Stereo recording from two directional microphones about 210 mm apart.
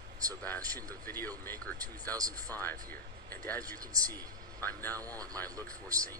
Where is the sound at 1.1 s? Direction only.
10° left (ahead or behind).